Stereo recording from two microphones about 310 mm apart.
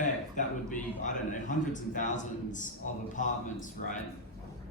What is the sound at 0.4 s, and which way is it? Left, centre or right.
Speech, left.